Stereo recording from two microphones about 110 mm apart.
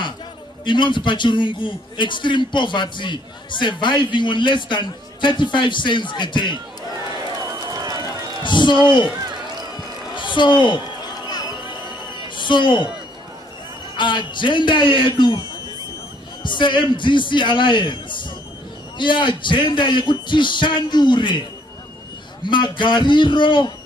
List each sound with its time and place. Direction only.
0.7 s a man's voice: 45° left (ahead or behind)
7.7 s run: 35° right (ahead or behind)
8.5 s a man's voice: 45° left (ahead or behind)
10.1 s a man's voice: 45° left (ahead or behind)
11.2 s a sound: 40° left (ahead or behind)
12.4 s speech: 45° left (ahead or behind)
13.9 s a man's voice: 45° left (ahead or behind)
16.4 s a man's voice: 45° left (ahead or behind)
22.4 s a man's voice: 45° left (ahead or behind)